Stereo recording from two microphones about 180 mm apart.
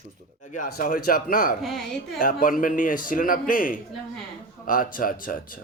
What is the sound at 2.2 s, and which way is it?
Speech, 50° left (ahead or behind).